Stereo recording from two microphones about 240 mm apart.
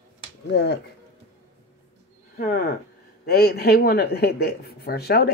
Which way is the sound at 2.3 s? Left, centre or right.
Left.